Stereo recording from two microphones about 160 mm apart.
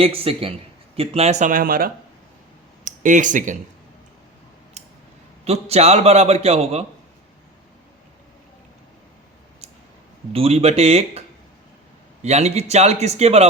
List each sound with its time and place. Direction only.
0.0 s a man's voice: 35° right (ahead or behind); by 1.9 s 65° right (ahead or behind)
2.8 s speech: 55° right (ahead or behind)
4.8 s scissors: 45° right (ahead or behind)
5.5 s a man's voice: 40° right (ahead or behind)
10.3 s a man's voice: 40° right (ahead or behind)
12.2 s a man's voice: 45° right (ahead or behind)